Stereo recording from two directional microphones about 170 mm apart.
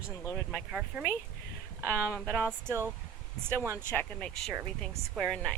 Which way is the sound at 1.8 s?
10° left (ahead or behind).